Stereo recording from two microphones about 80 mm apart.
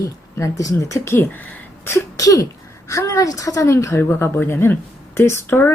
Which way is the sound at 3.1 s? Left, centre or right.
Left.